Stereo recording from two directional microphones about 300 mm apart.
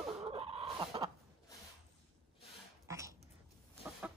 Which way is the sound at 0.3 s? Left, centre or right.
Centre.